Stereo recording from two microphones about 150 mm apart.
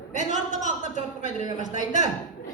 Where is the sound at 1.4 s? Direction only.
55° left (ahead or behind).